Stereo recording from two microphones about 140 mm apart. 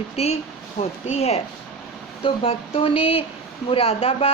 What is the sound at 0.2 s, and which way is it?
Speech, 45° left (ahead or behind).